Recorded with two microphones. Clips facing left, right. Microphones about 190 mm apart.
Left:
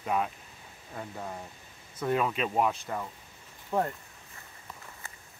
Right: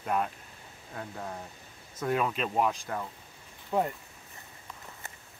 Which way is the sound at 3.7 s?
10° right (ahead or behind).